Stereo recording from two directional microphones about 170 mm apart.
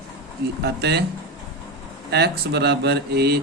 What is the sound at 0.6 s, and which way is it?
Speech, 75° right (ahead or behind).